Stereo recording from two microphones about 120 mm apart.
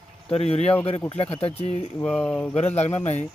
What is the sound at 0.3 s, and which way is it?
Speech, 60° left (ahead or behind).